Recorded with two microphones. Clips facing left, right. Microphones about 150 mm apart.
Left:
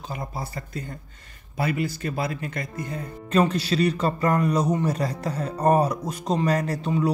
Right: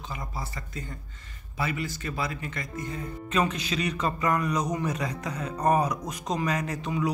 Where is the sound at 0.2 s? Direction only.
40° left (ahead or behind).